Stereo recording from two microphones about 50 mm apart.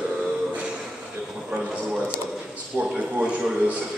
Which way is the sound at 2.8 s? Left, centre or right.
Right.